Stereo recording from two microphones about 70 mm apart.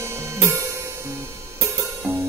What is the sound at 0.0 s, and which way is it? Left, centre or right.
Music, right.